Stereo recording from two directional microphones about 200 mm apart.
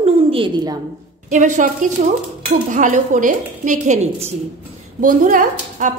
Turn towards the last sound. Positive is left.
turn(degrees=-40)  # may be behind; listen again after turning